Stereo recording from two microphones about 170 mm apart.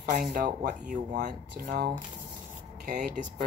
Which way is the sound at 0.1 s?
50° right (ahead or behind).